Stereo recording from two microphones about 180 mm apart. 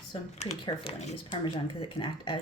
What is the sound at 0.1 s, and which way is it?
Speech, 35° left (ahead or behind).